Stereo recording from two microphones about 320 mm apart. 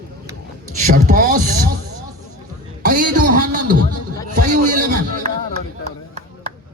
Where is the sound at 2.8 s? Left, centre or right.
Right.